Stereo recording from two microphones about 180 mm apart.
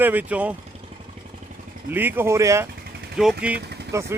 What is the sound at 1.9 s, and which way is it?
Speech, 10° right (ahead or behind).